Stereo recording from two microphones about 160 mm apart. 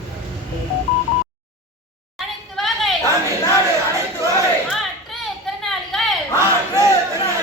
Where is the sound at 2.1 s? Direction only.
Centre (ahead or behind).